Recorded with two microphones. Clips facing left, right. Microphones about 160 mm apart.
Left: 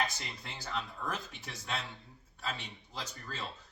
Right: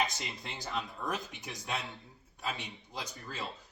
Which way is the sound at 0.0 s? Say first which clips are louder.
Right 2 dB; 20° right (ahead or behind).